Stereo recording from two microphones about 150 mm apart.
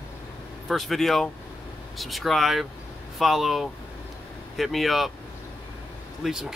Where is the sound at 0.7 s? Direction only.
Centre (ahead or behind).